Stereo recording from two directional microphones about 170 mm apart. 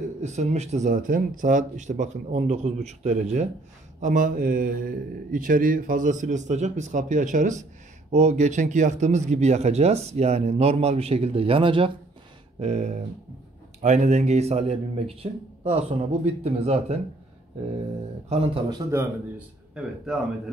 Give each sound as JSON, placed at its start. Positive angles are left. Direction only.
{"t": 0.2, "sound": "a man's voice", "side_deg": -45}
{"t": 12.5, "sound": "a man's voice", "side_deg": -40}
{"t": 18.3, "sound": "speech", "side_deg": -35}
{"t": 18.9, "sound": "a man's voice", "side_deg": -5}